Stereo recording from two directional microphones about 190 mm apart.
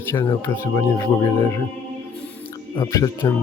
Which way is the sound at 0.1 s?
15° left (ahead or behind).